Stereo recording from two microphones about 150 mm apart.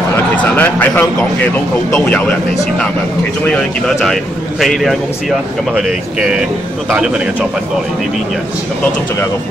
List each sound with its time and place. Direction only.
0.4 s speech: 10° left (ahead or behind)
3.4 s a man's voice: 5° left (ahead or behind)